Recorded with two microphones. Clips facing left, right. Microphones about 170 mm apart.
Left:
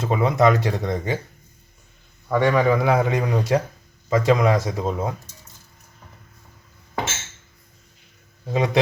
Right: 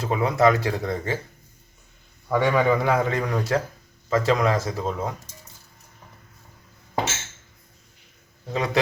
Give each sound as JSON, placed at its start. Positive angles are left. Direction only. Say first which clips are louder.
{"t": 0.0, "sound": "speech", "louder": "left 1 dB", "side_deg": 20}
{"t": 2.3, "sound": "a man's voice", "louder": "left 2 dB", "side_deg": 0}
{"t": 8.5, "sound": "speech", "louder": "left 3 dB", "side_deg": 20}